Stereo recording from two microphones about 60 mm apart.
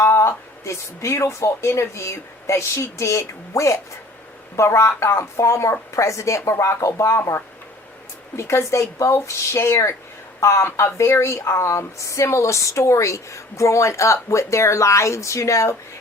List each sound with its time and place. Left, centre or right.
0.0 s speech: left